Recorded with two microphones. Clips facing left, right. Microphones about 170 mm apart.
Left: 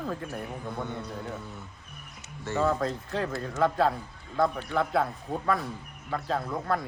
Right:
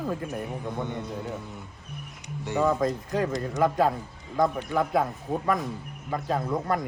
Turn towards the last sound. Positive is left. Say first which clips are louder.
# right 3 dB
turn(degrees=-15)  # may be behind; listen again after turning